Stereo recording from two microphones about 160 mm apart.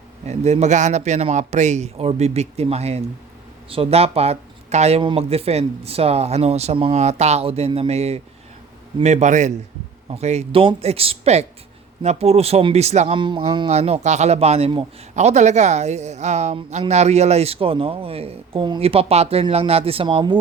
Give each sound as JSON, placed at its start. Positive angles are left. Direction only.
{"t": 0.3, "sound": "a man's voice", "side_deg": -45}
{"t": 13.1, "sound": "speech", "side_deg": -30}
{"t": 13.7, "sound": "a man's voice", "side_deg": -40}